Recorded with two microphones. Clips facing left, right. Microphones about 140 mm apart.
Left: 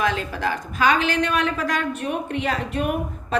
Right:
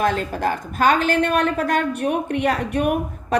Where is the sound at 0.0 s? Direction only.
45° right (ahead or behind).